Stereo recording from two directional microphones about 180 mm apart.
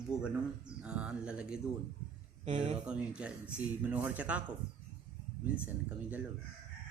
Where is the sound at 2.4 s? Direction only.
40° right (ahead or behind).